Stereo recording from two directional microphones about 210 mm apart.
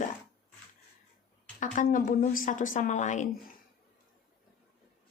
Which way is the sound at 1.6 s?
40° left (ahead or behind).